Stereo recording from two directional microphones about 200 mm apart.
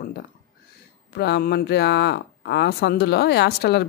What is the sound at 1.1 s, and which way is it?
Speech, 55° left (ahead or behind).